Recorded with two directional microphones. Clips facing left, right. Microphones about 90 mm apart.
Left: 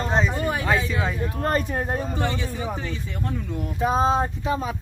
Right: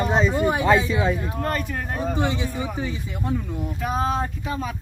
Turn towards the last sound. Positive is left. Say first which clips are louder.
# left 3 dB
turn(degrees=20)  # may be behind; listen again after turning